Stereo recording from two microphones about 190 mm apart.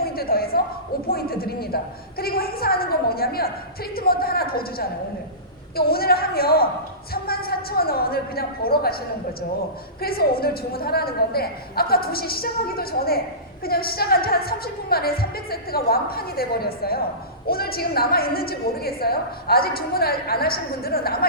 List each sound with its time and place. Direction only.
0.0 s a sound: 50° left (ahead or behind)
1.0 s a woman's voice: 50° left (ahead or behind)
10.0 s a woman's voice: 50° left (ahead or behind)